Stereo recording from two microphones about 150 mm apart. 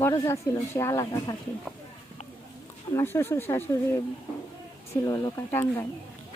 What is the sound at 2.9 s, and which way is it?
Speech, 15° left (ahead or behind).